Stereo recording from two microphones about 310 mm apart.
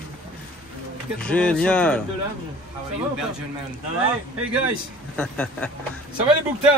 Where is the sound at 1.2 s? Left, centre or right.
Centre.